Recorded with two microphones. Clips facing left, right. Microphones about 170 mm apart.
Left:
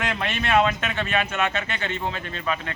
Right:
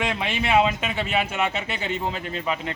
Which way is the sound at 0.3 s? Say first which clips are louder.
Even; 10° right (ahead or behind).